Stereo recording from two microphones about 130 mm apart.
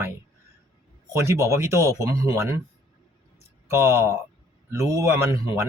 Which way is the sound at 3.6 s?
20° right (ahead or behind).